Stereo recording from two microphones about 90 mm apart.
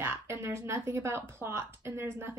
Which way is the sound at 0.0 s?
25° right (ahead or behind).